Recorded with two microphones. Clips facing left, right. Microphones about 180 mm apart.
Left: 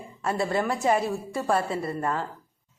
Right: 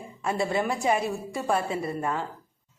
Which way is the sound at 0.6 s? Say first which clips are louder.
Left 1 dB; 15° right (ahead or behind).